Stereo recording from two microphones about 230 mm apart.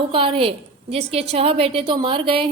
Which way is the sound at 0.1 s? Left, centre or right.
Right.